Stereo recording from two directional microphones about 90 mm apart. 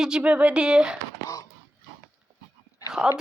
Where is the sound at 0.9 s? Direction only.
35° left (ahead or behind).